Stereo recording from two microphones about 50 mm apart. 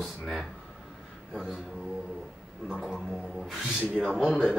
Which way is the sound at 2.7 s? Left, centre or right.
Centre.